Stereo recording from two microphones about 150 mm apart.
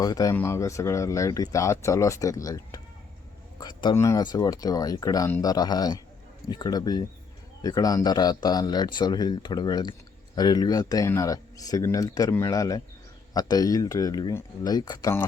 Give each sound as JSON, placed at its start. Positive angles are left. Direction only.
{"t": 0.0, "sound": "speech", "side_deg": 25}